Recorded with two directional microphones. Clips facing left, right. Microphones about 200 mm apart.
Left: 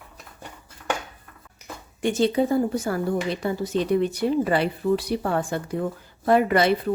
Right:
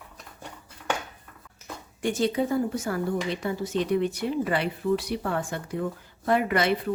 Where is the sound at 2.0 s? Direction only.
25° left (ahead or behind).